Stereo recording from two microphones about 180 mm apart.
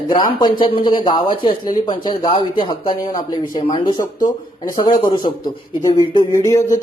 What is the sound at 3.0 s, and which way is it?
Speech, 50° left (ahead or behind).